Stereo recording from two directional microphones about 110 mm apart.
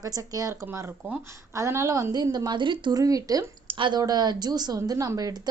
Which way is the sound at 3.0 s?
35° right (ahead or behind).